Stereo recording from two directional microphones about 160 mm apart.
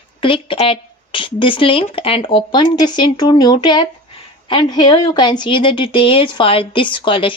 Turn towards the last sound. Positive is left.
turn(degrees=30)  # may be behind; listen again after turning